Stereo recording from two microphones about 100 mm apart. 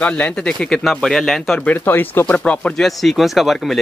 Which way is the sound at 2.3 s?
10° left (ahead or behind).